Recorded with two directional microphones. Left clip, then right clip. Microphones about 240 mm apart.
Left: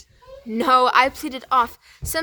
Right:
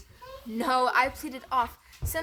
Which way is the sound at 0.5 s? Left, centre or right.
Left.